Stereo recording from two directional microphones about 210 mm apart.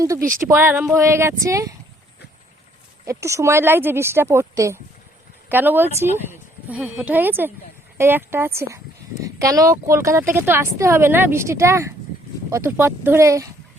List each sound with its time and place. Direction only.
0.0 s speech: 15° right (ahead or behind)
3.1 s speech: 15° right (ahead or behind)